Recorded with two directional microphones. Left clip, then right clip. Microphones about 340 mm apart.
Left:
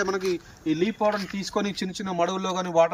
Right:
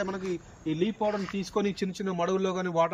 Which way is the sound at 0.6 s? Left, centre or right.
Centre.